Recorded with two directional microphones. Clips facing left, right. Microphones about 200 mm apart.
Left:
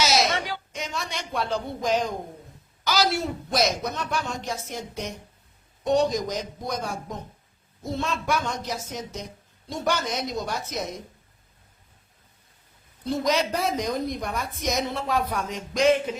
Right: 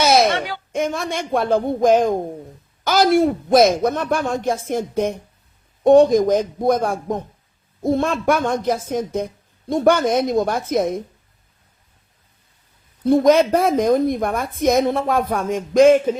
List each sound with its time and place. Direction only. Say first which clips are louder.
0.0 s speech: right 8 dB; 55° right (ahead or behind)
13.1 s speech: right 11 dB; 55° right (ahead or behind)